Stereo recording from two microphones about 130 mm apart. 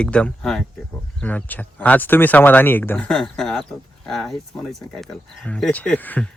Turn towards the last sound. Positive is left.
turn(degrees=15)  # may be behind; listen again after turning